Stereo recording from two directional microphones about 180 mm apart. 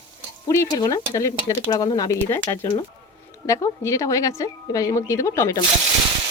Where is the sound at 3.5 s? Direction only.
15° left (ahead or behind).